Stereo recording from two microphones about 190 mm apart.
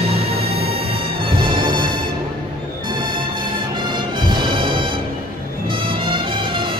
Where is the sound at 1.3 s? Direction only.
25° right (ahead or behind).